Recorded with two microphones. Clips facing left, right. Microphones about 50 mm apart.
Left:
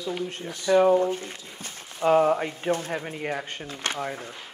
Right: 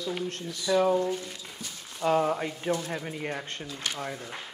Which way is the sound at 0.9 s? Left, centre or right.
Left.